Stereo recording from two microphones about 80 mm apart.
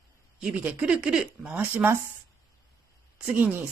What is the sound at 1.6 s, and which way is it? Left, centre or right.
Speech, right.